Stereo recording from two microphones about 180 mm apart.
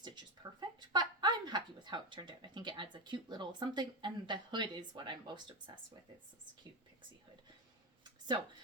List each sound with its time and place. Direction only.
0.0 s speech: 25° right (ahead or behind)